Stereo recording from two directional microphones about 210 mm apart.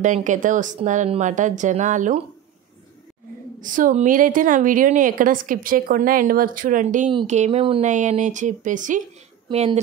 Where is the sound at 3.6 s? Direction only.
40° right (ahead or behind).